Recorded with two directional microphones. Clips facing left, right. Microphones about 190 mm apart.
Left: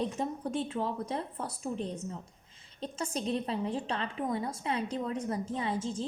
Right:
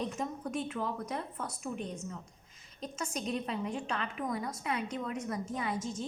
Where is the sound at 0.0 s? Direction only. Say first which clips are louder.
Left 3 dB; 30° left (ahead or behind).